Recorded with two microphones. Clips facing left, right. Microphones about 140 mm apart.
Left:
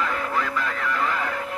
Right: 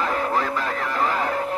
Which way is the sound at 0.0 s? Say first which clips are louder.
Right 3 dB; 35° right (ahead or behind).